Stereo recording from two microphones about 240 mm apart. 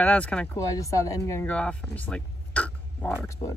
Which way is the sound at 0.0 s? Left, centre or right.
Centre.